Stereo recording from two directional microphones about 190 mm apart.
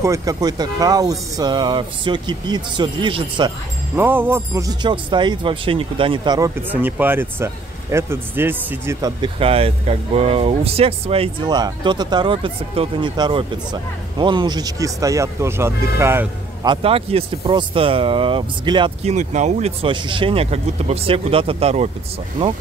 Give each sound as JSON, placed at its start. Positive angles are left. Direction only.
{"t": 0.0, "sound": "speech", "side_deg": -15}
{"t": 3.9, "sound": "speech", "side_deg": -10}
{"t": 6.7, "sound": "speech", "side_deg": -10}
{"t": 9.2, "sound": "speech", "side_deg": -30}
{"t": 16.6, "sound": "speech", "side_deg": -25}
{"t": 19.1, "sound": "speech", "side_deg": -40}